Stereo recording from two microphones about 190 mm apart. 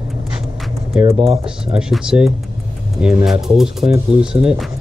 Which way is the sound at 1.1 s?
35° right (ahead or behind).